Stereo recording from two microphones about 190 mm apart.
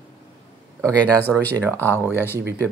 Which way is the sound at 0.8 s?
5° left (ahead or behind).